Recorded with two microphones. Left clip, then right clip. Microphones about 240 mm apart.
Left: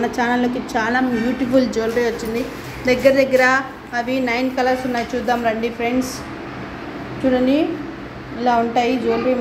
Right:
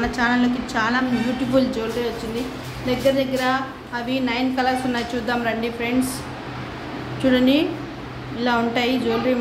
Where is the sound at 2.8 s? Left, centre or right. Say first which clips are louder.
Left 6 dB; left.